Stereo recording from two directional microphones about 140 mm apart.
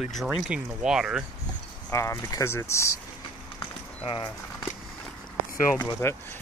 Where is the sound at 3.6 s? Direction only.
35° left (ahead or behind).